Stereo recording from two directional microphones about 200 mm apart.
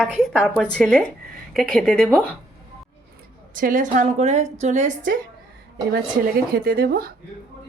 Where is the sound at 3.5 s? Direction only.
40° right (ahead or behind).